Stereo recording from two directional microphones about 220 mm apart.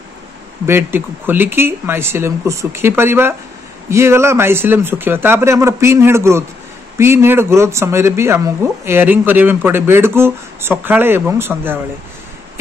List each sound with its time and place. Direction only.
0.7 s speech: 10° right (ahead or behind)